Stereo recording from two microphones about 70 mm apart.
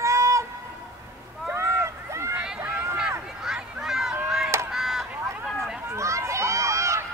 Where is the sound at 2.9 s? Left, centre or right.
Centre.